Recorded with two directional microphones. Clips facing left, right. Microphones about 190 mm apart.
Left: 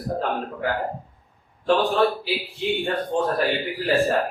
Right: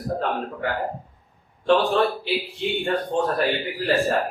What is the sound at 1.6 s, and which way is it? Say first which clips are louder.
Speech: even; centre (ahead or behind).